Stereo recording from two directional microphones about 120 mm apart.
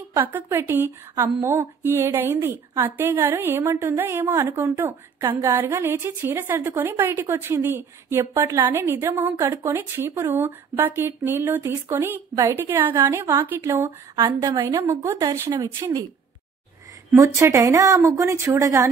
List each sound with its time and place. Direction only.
0.1 s speech: 20° right (ahead or behind)
14.1 s speech: 40° right (ahead or behind)
17.1 s speech: 25° right (ahead or behind)